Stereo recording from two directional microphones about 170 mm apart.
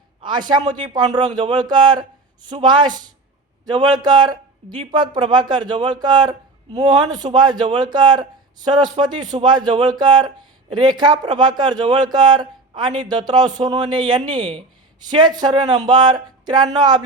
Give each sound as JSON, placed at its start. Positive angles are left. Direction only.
{"t": 0.2, "sound": "speech", "side_deg": -25}